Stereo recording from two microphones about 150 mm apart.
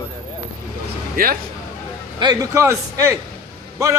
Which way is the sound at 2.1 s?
25° right (ahead or behind).